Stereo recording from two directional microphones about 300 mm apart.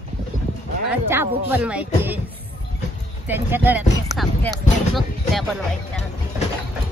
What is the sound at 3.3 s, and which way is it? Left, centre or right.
Speech, centre.